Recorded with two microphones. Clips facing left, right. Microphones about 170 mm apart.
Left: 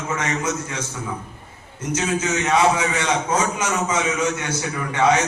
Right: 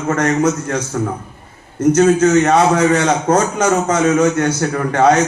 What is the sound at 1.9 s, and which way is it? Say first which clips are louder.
A man's voice: right 11 dB; 65° right (ahead or behind).